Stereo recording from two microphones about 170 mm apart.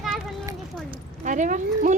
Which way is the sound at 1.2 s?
50° right (ahead or behind).